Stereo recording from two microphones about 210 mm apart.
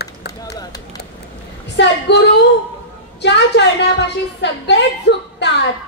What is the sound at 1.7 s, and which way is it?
A woman's voice, 55° left (ahead or behind).